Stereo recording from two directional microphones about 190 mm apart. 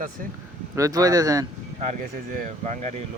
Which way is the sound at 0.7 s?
20° right (ahead or behind).